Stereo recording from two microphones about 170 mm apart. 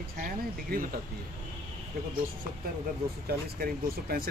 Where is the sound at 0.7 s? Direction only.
60° right (ahead or behind).